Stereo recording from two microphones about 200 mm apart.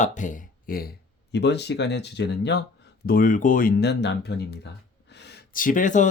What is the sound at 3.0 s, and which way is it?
Speech, 45° left (ahead or behind).